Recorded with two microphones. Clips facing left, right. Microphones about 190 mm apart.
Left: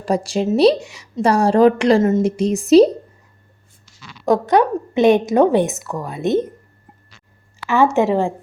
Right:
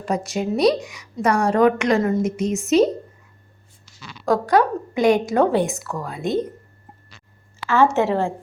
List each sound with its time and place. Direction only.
0.0 s a woman's voice: 30° left (ahead or behind)
4.3 s a woman's voice: 20° left (ahead or behind)
7.7 s a woman's voice: 15° left (ahead or behind)